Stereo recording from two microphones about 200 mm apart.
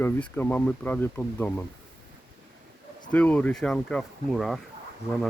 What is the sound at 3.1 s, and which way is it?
Speech, 5° left (ahead or behind).